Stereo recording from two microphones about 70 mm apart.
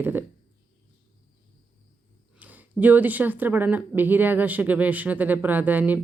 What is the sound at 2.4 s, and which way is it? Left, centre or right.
Speech, right.